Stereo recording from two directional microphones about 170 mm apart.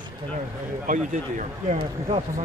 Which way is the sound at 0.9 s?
50° right (ahead or behind).